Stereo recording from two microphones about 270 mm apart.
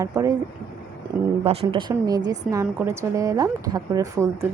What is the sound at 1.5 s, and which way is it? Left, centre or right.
A woman's voice, centre.